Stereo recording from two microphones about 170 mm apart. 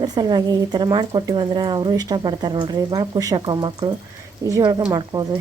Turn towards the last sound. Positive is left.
turn(degrees=-25)  # may be behind; listen again after turning